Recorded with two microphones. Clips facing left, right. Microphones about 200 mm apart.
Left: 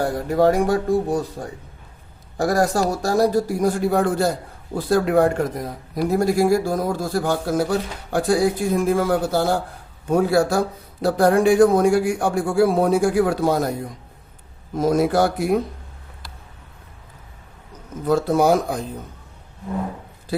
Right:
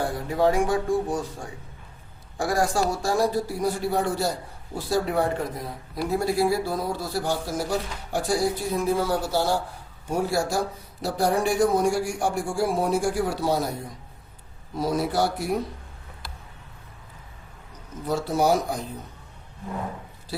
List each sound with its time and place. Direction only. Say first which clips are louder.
0.0 s a man's voice: left 5 dB; 40° left (ahead or behind)
14.8 s speech: left 6 dB; 50° left (ahead or behind)
18.0 s speech: left 6 dB; 50° left (ahead or behind)